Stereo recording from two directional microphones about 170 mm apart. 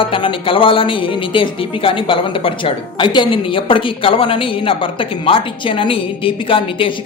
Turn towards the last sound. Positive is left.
turn(degrees=30)  # may be behind; listen again after turning